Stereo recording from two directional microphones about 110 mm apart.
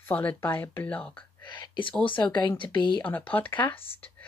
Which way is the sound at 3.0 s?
15° left (ahead or behind).